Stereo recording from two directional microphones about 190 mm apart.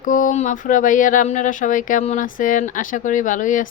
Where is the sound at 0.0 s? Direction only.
45° left (ahead or behind).